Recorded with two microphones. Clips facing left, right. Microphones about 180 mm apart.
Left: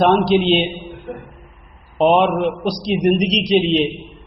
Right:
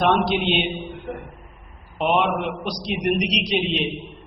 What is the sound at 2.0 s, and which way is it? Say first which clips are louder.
A man's voice: left 7 dB; 35° left (ahead or behind).